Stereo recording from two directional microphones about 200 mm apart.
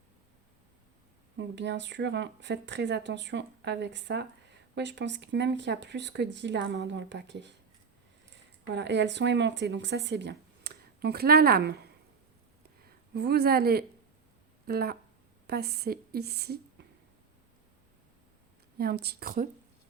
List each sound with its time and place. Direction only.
1.4 s speech: 65° right (ahead or behind)
8.7 s speech: 60° right (ahead or behind)
13.1 s a woman's voice: 55° right (ahead or behind)
18.8 s a woman's voice: 50° right (ahead or behind)